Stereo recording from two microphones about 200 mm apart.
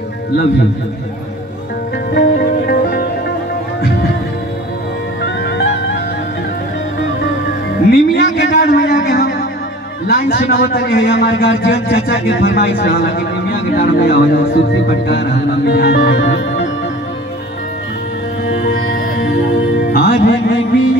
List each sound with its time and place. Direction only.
2.1 s music: 50° left (ahead or behind)
5.2 s music: 55° left (ahead or behind)
7.9 s a sound: 55° left (ahead or behind)
10.0 s a man's voice: 55° left (ahead or behind)
19.9 s music: 50° left (ahead or behind)